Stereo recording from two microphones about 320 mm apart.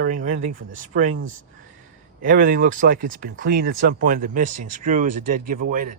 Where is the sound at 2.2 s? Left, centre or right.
Right.